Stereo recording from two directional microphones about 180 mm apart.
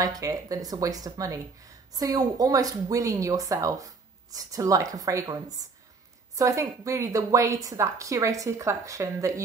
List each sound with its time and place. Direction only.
0.0 s a woman's voice: 20° right (ahead or behind)